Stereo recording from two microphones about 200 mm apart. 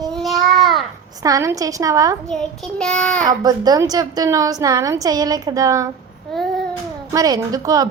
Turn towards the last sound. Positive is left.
turn(degrees=-20)  # may be behind; listen again after turning